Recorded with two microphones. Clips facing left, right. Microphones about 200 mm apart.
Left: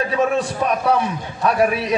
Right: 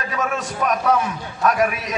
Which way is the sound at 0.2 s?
30° left (ahead or behind).